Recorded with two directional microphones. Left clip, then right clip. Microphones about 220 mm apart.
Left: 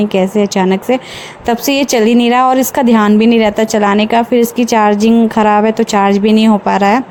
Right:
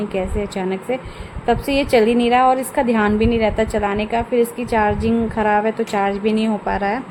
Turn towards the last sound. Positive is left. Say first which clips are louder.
# left 10 dB
turn(degrees=35)  # may be behind; listen again after turning